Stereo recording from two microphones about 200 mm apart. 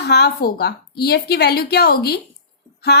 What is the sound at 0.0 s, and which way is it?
A woman's voice, 55° left (ahead or behind).